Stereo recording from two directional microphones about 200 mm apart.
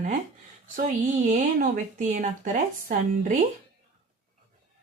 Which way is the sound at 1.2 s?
40° right (ahead or behind).